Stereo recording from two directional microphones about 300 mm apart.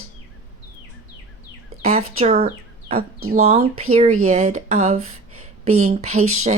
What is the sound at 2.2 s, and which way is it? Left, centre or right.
Speech, right.